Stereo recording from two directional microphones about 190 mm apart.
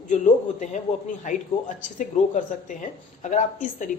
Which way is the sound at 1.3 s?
45° left (ahead or behind).